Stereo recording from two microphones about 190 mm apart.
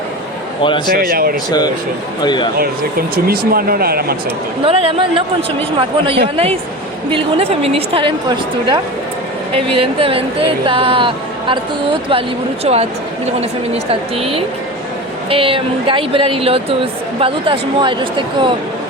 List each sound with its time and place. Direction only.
0.9 s speech: 50° right (ahead or behind)
1.5 s speech: 20° left (ahead or behind)
3.2 s speech: 50° right (ahead or behind)
4.6 s a woman's voice: 30° right (ahead or behind)
12.6 s speech: 35° right (ahead or behind)
14.2 s a woman's voice: 30° right (ahead or behind)